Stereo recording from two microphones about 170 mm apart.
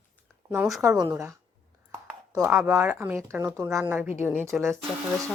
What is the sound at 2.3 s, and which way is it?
Speech, 15° right (ahead or behind).